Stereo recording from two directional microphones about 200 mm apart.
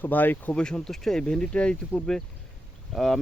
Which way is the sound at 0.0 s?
10° left (ahead or behind).